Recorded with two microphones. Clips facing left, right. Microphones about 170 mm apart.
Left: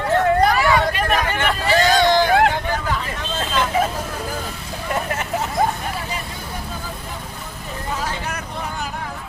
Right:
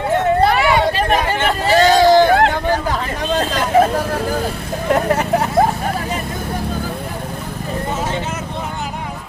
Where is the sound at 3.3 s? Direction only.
40° right (ahead or behind).